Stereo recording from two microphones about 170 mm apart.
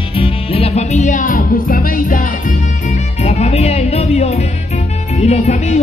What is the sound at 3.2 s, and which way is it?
Music, 40° left (ahead or behind).